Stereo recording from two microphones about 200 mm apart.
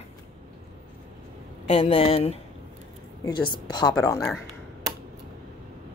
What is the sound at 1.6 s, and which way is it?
Speech, 30° left (ahead or behind).